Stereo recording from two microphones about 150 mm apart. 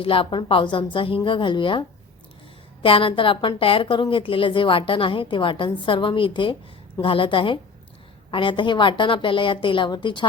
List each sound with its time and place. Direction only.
0.0 s a woman's voice: 35° left (ahead or behind)
2.8 s a woman's voice: 35° left (ahead or behind)